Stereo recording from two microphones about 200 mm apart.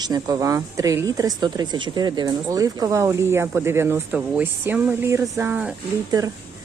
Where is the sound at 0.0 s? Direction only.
20° right (ahead or behind).